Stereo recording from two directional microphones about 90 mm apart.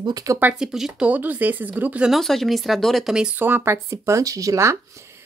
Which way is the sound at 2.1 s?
Centre (ahead or behind).